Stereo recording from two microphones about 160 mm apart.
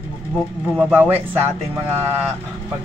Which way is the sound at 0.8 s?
10° right (ahead or behind).